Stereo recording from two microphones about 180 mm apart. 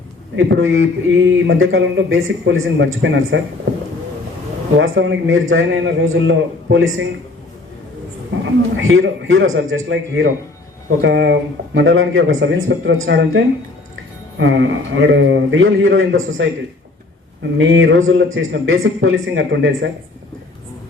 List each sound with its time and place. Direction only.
0.3 s speech: 90° right
4.8 s speech: 75° right (ahead or behind)
8.3 s speech: 90° right
11.0 s speech: 75° right (ahead or behind); by 16.5 s 90° right
17.6 s speech: 90° right